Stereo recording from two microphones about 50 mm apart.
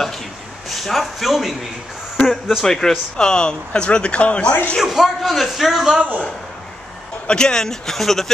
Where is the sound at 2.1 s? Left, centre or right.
Centre.